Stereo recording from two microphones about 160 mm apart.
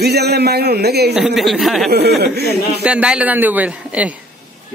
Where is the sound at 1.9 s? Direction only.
90° right.